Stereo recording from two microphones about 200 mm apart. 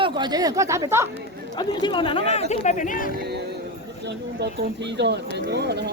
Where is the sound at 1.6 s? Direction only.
25° left (ahead or behind); by 3.1 s 40° left (ahead or behind).